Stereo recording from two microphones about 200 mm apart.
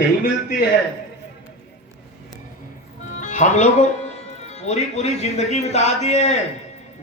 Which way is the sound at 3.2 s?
40° left (ahead or behind).